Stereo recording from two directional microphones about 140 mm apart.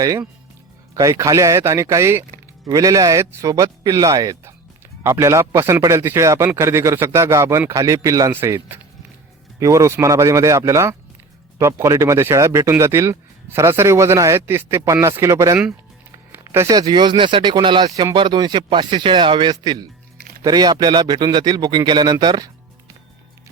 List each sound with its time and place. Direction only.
0.0 s speech: 25° right (ahead or behind)